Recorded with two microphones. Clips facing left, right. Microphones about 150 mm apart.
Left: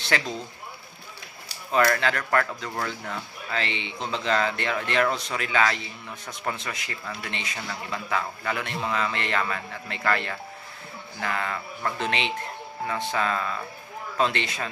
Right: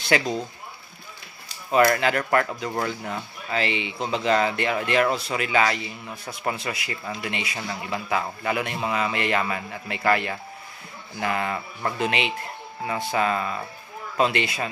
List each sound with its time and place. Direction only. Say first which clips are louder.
0.1 s speech: right 4 dB; 15° right (ahead or behind)
2.0 s speech: right 3 dB; 10° right (ahead or behind)
12.1 s speech: right 1 dB; 5° right (ahead or behind)